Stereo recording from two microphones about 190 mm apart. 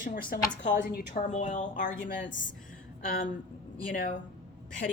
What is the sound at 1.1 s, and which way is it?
Speech, 40° left (ahead or behind).